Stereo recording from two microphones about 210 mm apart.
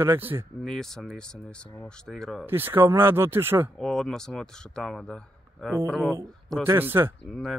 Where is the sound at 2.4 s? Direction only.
10° right (ahead or behind).